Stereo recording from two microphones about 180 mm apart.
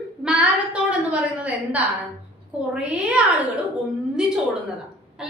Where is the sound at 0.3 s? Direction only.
5° right (ahead or behind).